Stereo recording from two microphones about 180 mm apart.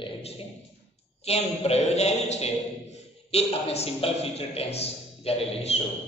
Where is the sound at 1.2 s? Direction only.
35° left (ahead or behind).